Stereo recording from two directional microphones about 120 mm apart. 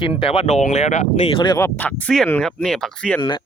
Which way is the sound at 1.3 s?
45° left (ahead or behind).